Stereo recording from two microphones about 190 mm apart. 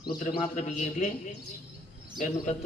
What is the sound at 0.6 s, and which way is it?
Speech, 40° left (ahead or behind).